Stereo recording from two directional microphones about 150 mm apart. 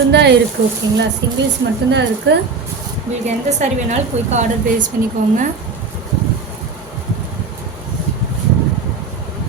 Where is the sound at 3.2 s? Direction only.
50° right (ahead or behind).